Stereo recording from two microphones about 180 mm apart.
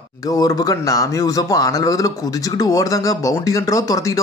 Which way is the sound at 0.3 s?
20° left (ahead or behind).